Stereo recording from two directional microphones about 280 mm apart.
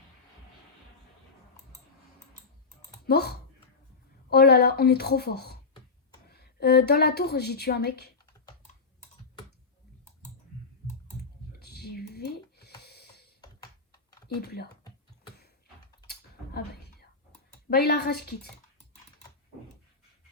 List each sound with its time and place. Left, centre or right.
3.1 s a woman's voice: left
11.6 s a sound: left
13.4 s computer keyboard: centre
14.3 s a woman's voice: left
16.6 s a sound: left
17.7 s a woman's voice: left